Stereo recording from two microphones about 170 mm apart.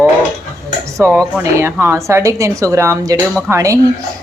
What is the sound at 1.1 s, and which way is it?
Speech, 5° right (ahead or behind).